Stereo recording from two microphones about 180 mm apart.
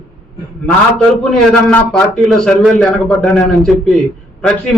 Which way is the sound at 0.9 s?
5° left (ahead or behind).